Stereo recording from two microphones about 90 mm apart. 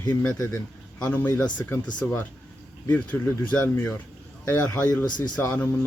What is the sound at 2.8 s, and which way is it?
Speech, 15° left (ahead or behind).